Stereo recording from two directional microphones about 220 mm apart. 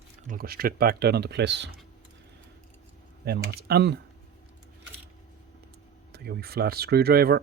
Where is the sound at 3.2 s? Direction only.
45° right (ahead or behind).